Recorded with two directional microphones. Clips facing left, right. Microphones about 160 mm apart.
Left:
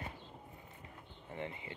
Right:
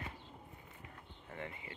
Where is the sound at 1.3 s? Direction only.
25° left (ahead or behind).